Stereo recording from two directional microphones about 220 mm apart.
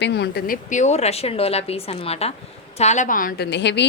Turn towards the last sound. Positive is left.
turn(degrees=50)  # may be behind; listen again after turning